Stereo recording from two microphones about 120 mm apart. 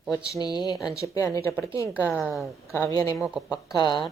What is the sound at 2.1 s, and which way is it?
Speech, 10° left (ahead or behind).